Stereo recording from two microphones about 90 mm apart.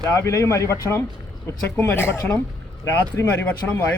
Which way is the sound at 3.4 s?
20° left (ahead or behind).